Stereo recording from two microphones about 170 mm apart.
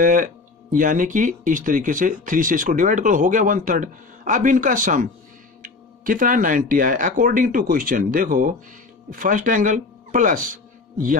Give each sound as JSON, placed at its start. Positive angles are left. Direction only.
{"t": 0.0, "sound": "speech", "side_deg": -50}